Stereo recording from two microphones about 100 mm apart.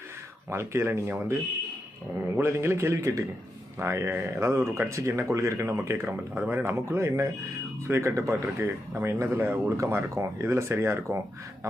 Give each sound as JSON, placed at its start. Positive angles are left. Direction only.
{"t": 0.5, "sound": "speech", "side_deg": -25}
{"t": 6.3, "sound": "speech", "side_deg": -15}